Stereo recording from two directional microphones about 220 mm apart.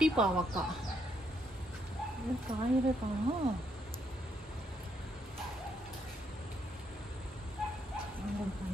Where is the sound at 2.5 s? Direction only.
25° right (ahead or behind).